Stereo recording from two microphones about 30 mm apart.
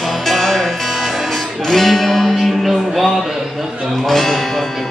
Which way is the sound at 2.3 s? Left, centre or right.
Centre.